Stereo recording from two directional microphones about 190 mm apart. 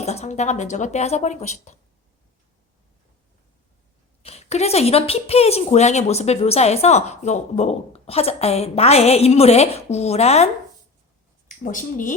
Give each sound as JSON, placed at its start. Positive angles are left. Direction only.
{"t": 0.0, "sound": "a woman's voice", "side_deg": 35}
{"t": 4.2, "sound": "a woman's voice", "side_deg": 35}
{"t": 11.6, "sound": "speech", "side_deg": 45}